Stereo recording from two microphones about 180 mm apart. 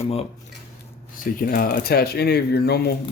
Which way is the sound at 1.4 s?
55° left (ahead or behind).